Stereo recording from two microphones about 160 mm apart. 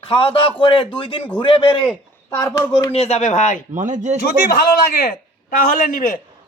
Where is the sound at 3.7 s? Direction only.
50° right (ahead or behind).